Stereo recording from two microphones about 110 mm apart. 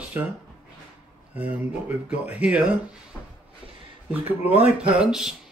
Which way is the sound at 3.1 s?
15° left (ahead or behind).